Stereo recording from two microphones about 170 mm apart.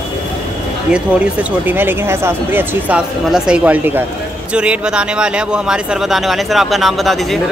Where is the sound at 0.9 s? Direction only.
10° right (ahead or behind).